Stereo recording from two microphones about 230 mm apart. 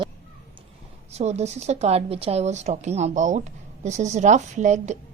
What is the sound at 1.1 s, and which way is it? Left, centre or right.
A woman's voice, right.